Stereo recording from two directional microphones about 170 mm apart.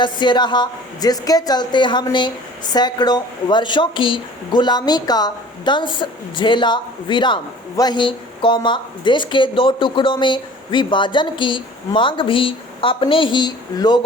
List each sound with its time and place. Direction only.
0.0 s speech: 25° left (ahead or behind)